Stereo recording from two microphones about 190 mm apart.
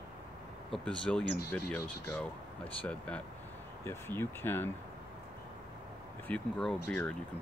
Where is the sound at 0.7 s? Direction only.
5° left (ahead or behind).